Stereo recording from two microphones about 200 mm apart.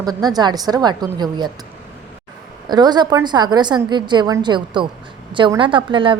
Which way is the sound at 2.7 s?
20° right (ahead or behind).